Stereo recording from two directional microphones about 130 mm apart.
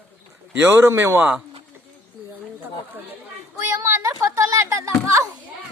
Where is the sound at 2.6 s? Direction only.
15° right (ahead or behind).